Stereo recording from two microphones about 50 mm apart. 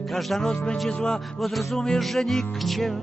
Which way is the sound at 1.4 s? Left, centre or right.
Centre.